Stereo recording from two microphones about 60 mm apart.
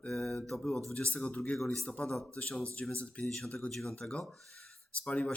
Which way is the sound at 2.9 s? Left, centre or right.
Left.